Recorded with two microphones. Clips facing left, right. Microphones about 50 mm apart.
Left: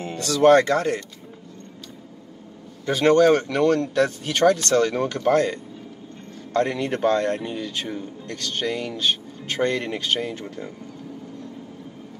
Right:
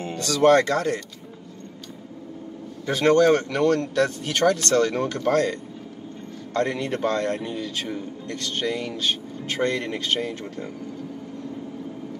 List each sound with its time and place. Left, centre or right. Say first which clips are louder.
0.4 s speech: left 2 dB; left
2.9 s speech: left 1 dB; left